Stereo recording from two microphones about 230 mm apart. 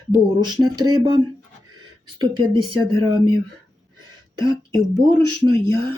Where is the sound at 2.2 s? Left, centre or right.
Centre.